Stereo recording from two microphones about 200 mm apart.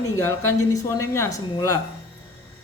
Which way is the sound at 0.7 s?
15° left (ahead or behind).